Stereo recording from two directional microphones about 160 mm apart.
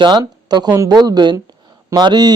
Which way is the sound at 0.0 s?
30° right (ahead or behind).